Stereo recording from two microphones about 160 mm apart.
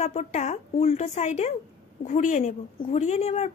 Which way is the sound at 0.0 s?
45° left (ahead or behind).